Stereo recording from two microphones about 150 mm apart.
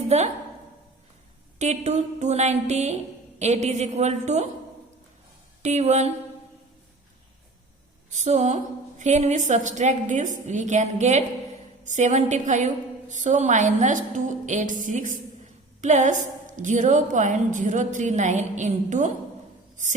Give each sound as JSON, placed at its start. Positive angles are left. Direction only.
{"t": 0.1, "sound": "a woman's voice", "side_deg": -45}
{"t": 1.5, "sound": "a woman's voice", "side_deg": -50}
{"t": 5.6, "sound": "a woman's voice", "side_deg": -50}
{"t": 8.1, "sound": "a woman's voice", "side_deg": -50}